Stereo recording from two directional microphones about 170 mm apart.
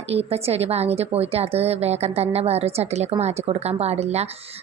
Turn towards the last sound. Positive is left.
turn(degrees=-40)  # may be behind; listen again after turning